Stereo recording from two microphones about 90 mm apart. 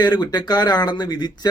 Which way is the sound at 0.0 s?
50° left (ahead or behind).